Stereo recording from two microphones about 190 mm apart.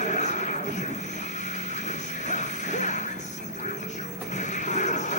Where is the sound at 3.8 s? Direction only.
40° left (ahead or behind).